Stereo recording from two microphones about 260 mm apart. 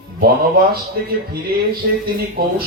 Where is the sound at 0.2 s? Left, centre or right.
Right.